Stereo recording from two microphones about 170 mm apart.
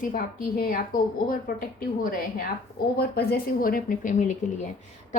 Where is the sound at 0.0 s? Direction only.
55° left (ahead or behind).